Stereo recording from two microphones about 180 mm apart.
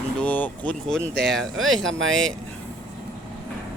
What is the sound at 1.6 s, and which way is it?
Speech, 90° right.